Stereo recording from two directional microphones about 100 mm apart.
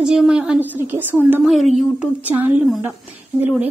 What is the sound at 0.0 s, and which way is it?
A woman's voice, 5° right (ahead or behind).